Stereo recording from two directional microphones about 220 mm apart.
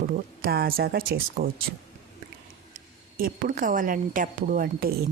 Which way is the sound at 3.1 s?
40° right (ahead or behind).